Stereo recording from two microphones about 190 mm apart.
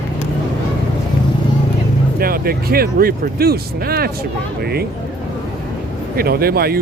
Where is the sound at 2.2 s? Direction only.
50° right (ahead or behind).